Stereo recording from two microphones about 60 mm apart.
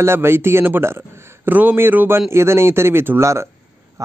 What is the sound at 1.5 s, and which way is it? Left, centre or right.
A man's voice, right.